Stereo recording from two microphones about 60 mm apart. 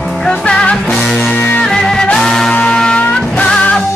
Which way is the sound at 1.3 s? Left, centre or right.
Left.